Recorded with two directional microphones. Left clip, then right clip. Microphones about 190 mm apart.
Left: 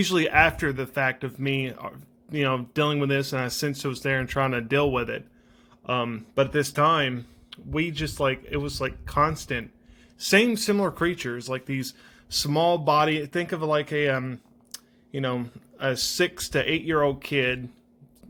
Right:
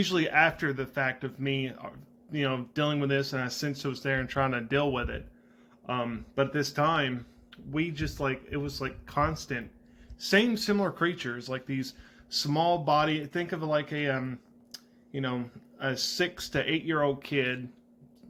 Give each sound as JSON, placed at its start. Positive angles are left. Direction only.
{"t": 0.0, "sound": "speech", "side_deg": 45}